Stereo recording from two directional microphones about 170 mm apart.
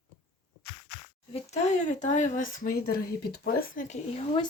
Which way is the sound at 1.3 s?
40° left (ahead or behind).